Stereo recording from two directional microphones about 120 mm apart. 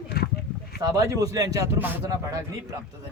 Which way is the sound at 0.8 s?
30° right (ahead or behind).